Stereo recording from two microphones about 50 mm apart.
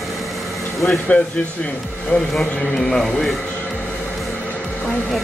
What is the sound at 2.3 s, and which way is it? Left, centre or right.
A man's voice, centre.